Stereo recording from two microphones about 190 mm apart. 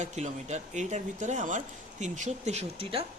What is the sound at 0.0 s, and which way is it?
Speech, 35° right (ahead or behind).